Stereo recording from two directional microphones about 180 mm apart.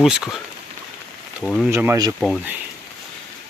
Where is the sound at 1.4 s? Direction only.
Centre (ahead or behind).